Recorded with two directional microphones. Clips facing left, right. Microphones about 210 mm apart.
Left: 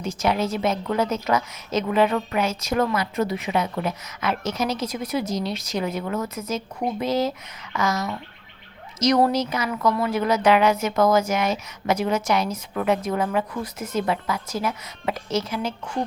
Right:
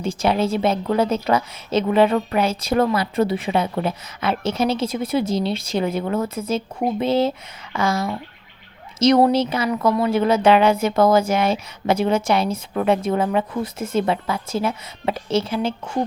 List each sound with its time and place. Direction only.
0.0 s a woman's voice: 30° right (ahead or behind)